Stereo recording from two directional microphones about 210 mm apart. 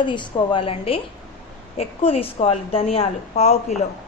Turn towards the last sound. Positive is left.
turn(degrees=30)  # may be behind; listen again after turning